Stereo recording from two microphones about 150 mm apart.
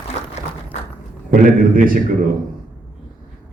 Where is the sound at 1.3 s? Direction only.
65° right (ahead or behind).